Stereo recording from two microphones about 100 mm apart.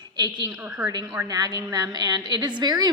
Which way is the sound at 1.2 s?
40° right (ahead or behind).